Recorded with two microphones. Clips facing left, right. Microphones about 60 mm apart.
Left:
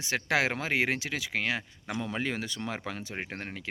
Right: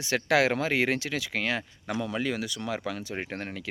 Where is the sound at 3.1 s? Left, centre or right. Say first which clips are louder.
Right 3 dB; centre.